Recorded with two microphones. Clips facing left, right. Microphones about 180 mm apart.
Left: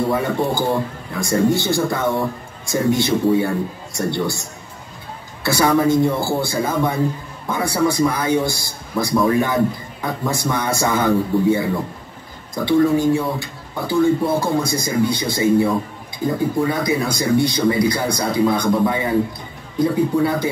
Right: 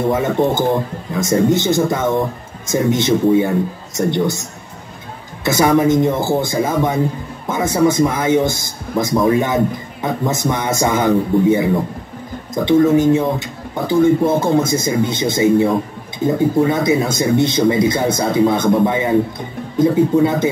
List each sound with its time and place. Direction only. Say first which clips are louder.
0.1 s a man's voice: right 4 dB; 20° right (ahead or behind)
20.2 s a man's voice: right 4 dB; 20° right (ahead or behind)